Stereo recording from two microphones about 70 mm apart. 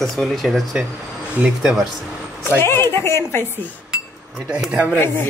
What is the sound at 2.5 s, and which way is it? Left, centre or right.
A woman's voice, left.